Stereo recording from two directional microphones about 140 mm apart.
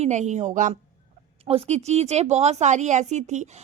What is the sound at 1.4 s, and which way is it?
Speech, 45° right (ahead or behind).